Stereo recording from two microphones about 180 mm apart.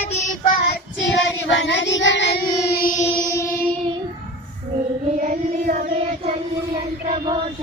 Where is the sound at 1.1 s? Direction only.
85° left; by 3.0 s 50° left (ahead or behind).